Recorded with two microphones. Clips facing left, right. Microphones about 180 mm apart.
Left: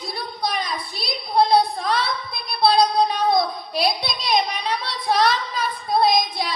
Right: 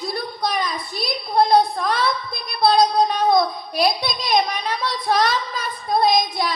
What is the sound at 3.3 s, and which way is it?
Child singing, 50° right (ahead or behind).